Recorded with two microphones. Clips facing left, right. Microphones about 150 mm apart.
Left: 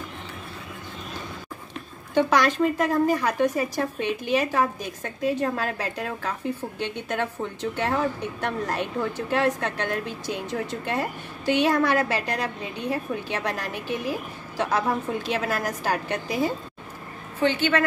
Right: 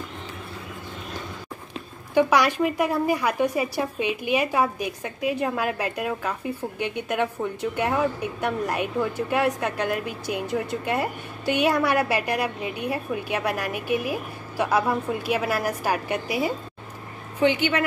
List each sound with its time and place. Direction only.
2.1 s a woman's voice: 10° right (ahead or behind)